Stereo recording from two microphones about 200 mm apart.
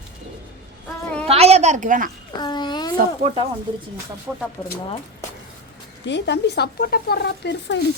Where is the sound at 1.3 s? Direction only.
30° right (ahead or behind).